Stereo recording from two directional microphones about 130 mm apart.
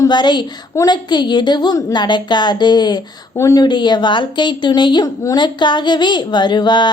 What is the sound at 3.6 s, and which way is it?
A woman's voice, 35° left (ahead or behind).